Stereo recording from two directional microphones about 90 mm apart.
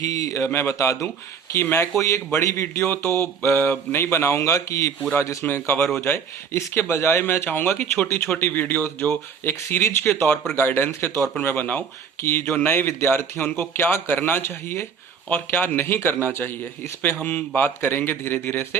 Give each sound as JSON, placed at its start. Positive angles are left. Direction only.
{"t": 0.0, "sound": "speech", "side_deg": 40}
{"t": 1.6, "sound": "speech", "side_deg": 25}
{"t": 2.8, "sound": "speech", "side_deg": 20}